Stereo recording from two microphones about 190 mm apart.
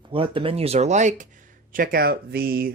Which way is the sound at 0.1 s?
25° right (ahead or behind).